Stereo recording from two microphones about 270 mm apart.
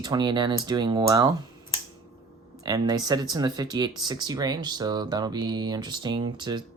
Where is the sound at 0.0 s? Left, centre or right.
Centre.